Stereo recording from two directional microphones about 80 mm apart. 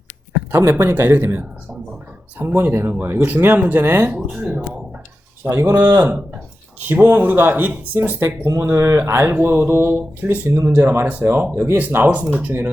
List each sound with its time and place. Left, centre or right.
0.5 s speech: right
5.5 s speech: right
8.4 s speech: right